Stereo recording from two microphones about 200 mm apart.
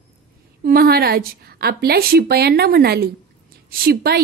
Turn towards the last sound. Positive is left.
turn(degrees=-50)  # may be behind; listen again after turning